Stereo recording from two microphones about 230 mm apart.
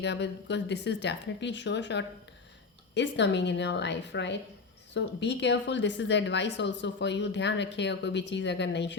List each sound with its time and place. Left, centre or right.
0.0 s speech: left